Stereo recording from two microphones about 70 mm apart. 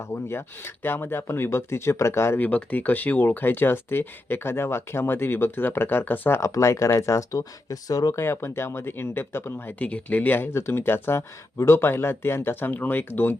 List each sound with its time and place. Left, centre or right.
0.0 s speech: left
2.4 s speech: left
6.4 s speech: left
8.1 s speech: left
9.7 s speech: left
10.5 s speech: left